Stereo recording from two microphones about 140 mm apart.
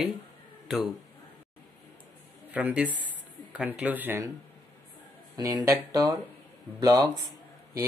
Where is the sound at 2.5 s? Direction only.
10° right (ahead or behind).